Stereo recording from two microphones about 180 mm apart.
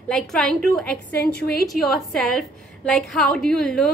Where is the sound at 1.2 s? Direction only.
55° left (ahead or behind).